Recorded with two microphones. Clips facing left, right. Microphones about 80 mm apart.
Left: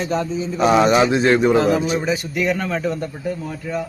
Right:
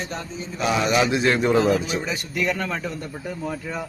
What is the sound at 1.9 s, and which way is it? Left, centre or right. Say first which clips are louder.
A man's voice: left 6 dB; centre.